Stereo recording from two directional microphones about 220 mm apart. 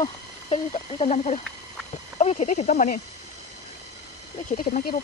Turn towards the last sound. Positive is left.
turn(degrees=35)  # may be behind; listen again after turning